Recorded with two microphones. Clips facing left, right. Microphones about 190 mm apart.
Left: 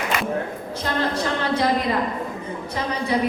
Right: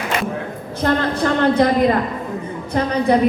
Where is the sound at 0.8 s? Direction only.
55° right (ahead or behind).